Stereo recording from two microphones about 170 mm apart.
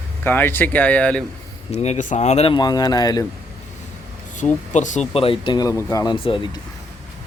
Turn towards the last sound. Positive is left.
turn(degrees=30)  # may be behind; listen again after turning